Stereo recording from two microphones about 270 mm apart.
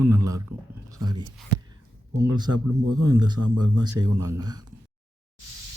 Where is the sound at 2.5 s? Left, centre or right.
Right.